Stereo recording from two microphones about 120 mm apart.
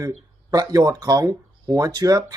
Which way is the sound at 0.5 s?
30° right (ahead or behind).